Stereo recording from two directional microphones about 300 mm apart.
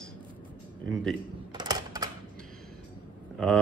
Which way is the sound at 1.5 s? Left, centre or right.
Centre.